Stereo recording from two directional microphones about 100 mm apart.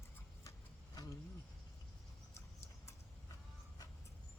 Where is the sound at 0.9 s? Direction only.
40° left (ahead or behind).